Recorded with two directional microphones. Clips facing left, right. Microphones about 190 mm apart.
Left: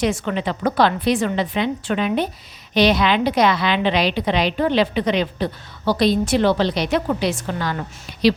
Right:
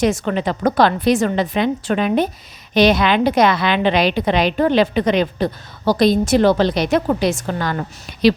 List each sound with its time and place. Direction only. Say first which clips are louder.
0.0 s a woman's voice: right 3 dB; 45° right (ahead or behind)